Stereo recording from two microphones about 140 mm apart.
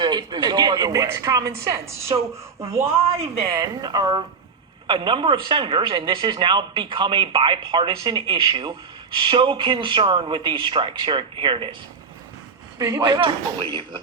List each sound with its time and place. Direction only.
0.0 s speech: 30° right (ahead or behind)
12.8 s speech: 25° right (ahead or behind)